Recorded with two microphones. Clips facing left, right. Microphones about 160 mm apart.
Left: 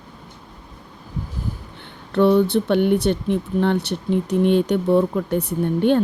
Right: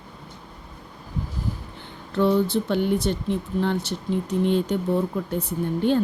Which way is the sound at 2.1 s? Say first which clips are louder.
Left 5 dB; 65° left (ahead or behind).